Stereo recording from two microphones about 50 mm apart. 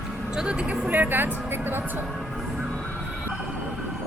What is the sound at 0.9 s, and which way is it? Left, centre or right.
Speech, right.